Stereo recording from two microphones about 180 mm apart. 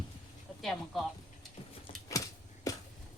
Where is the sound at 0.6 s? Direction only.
Centre (ahead or behind).